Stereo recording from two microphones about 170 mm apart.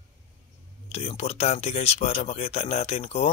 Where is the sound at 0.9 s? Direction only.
40° left (ahead or behind).